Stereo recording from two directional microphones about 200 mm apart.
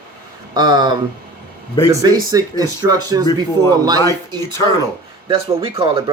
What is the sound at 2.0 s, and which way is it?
Speech, 20° right (ahead or behind).